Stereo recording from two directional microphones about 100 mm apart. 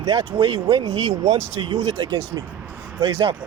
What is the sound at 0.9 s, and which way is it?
Speech, 90° right.